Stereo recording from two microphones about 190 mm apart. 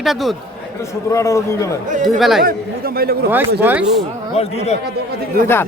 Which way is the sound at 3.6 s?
10° right (ahead or behind).